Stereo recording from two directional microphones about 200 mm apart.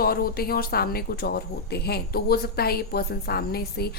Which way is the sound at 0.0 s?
50° left (ahead or behind).